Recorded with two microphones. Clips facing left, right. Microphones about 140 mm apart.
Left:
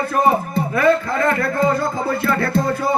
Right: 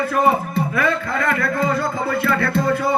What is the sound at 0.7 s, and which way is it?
Speech, 30° left (ahead or behind).